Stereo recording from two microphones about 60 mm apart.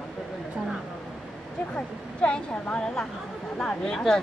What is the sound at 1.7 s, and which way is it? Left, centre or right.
A woman's voice, centre.